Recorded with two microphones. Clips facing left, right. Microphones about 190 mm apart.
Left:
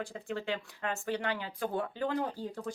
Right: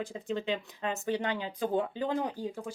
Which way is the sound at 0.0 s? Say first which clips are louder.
Right 3 dB; 20° right (ahead or behind).